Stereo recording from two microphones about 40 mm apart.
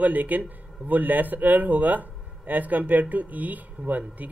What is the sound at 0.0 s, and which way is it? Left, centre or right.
Speech, right.